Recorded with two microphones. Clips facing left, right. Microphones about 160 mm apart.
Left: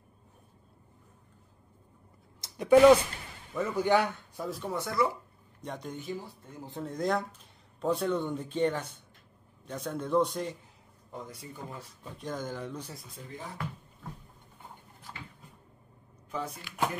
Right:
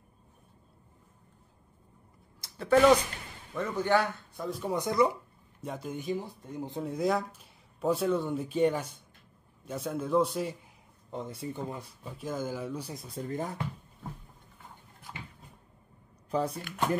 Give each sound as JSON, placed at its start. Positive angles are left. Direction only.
{"t": 2.4, "sound": "a man's voice", "side_deg": 15}
{"t": 4.6, "sound": "speech", "side_deg": -15}
{"t": 5.6, "sound": "a man's voice", "side_deg": -5}
{"t": 11.1, "sound": "speech", "side_deg": -25}
{"t": 11.8, "sound": "speech", "side_deg": -5}
{"t": 13.1, "sound": "speech", "side_deg": -45}
{"t": 15.1, "sound": "cupboard open or close", "side_deg": -5}
{"t": 16.3, "sound": "speech", "side_deg": -35}